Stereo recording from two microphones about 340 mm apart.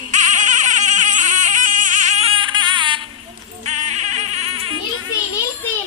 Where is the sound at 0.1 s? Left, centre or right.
Right.